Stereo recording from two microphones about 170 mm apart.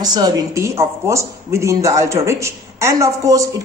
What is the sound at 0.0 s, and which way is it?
A woman's voice, 25° right (ahead or behind).